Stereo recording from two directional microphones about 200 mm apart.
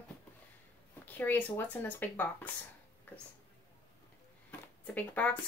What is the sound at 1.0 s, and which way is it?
Speech, 10° left (ahead or behind).